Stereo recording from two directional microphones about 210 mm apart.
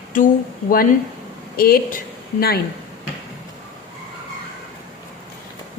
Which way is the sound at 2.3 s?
45° left (ahead or behind).